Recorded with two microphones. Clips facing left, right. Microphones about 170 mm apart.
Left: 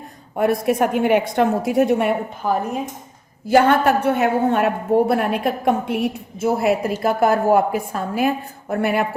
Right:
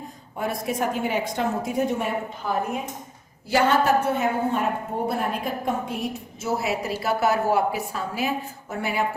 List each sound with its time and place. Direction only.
0.3 s a woman's voice: 60° left (ahead or behind)
3.4 s a woman's voice: 55° left (ahead or behind)